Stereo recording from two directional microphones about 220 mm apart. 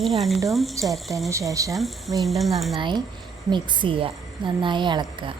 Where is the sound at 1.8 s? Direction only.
Centre (ahead or behind).